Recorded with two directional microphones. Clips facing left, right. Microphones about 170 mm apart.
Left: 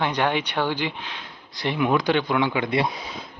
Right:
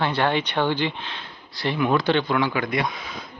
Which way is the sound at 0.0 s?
15° left (ahead or behind).